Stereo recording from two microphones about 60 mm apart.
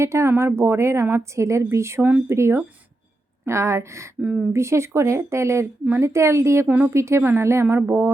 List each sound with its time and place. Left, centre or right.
0.0 s speech: right
2.0 s speech: right
2.2 s speech: right
4.2 s speech: right
4.5 s speech: right
7.2 s speech: right